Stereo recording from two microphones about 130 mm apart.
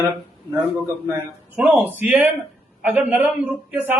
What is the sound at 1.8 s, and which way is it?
A man's voice, 15° right (ahead or behind).